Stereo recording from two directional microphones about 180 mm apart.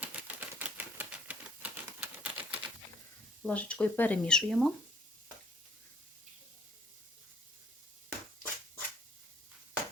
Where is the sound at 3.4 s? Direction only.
5° left (ahead or behind).